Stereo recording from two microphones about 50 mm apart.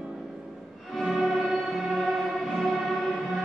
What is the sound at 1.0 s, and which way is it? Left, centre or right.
Music, centre.